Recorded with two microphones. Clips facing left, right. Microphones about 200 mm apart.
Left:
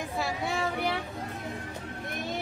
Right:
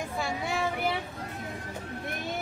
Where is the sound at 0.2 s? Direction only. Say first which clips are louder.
Even; centre (ahead or behind).